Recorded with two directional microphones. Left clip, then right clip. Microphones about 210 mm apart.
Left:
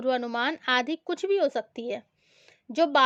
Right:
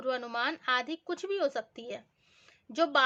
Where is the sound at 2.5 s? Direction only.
30° left (ahead or behind).